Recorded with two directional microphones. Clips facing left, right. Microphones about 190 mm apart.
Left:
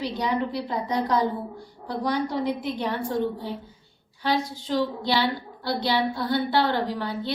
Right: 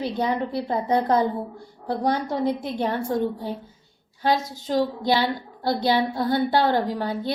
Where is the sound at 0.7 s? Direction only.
50° right (ahead or behind).